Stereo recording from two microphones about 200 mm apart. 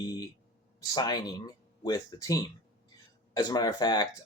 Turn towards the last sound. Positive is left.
turn(degrees=20)  # may be behind; listen again after turning